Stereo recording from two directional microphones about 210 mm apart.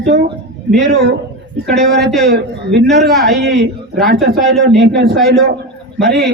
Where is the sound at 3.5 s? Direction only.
55° right (ahead or behind).